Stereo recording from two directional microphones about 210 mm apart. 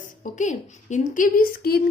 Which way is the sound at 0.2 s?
35° left (ahead or behind).